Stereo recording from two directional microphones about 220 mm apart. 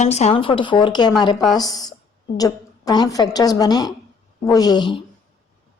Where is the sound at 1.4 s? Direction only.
Centre (ahead or behind).